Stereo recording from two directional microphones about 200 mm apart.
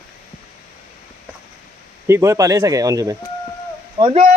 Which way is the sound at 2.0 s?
15° right (ahead or behind).